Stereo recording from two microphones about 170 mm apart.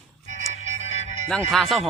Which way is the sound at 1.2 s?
5° left (ahead or behind).